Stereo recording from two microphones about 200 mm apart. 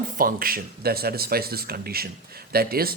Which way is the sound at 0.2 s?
45° right (ahead or behind).